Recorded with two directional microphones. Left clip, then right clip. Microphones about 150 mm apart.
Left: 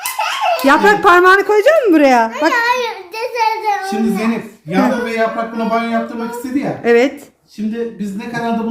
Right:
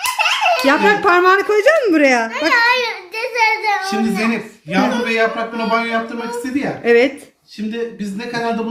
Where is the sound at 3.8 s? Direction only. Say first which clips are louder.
Even; 5° left (ahead or behind).